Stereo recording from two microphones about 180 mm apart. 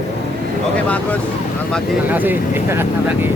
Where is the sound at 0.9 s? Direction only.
10° left (ahead or behind).